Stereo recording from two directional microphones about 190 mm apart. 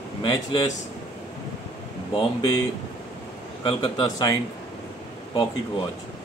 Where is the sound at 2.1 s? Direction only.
25° left (ahead or behind).